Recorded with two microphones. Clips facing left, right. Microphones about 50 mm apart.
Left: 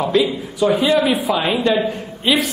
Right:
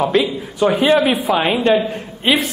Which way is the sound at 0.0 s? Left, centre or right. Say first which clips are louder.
Right 1 dB; right.